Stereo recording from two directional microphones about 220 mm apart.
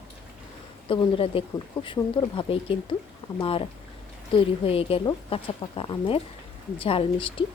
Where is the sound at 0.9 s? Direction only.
25° left (ahead or behind).